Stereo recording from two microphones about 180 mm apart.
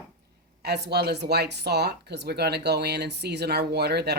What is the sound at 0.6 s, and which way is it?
Speech, 65° right (ahead or behind).